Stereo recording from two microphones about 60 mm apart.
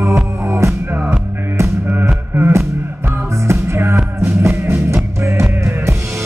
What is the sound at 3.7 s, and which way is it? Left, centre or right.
Music, right.